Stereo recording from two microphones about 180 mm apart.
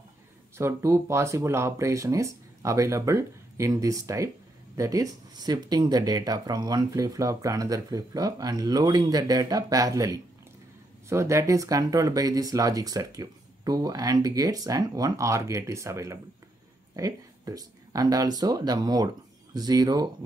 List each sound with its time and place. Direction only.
0.6 s speech: 15° right (ahead or behind)